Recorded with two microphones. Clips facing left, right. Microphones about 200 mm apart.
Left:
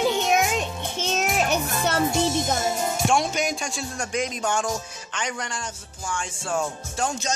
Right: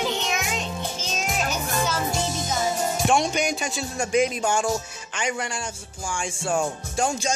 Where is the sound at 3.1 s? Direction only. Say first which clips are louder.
Right 2 dB; centre (ahead or behind).